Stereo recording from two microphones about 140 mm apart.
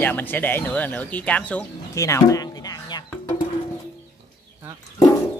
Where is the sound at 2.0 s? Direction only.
20° left (ahead or behind).